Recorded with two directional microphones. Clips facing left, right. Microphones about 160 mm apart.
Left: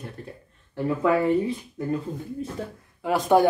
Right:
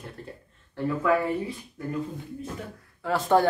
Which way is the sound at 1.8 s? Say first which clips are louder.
Left 5 dB; 20° left (ahead or behind).